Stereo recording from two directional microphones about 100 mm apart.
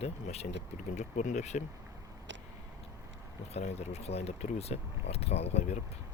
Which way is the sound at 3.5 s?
90° left.